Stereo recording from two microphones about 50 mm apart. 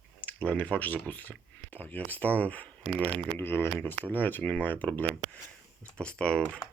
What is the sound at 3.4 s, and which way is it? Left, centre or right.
Speech, left.